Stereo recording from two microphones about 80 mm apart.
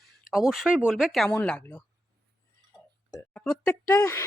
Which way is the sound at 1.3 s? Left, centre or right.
Centre.